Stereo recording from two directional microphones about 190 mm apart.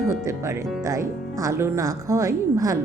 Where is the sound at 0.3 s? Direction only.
15° right (ahead or behind).